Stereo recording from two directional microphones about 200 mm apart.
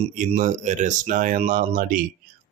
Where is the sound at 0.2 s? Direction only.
40° right (ahead or behind).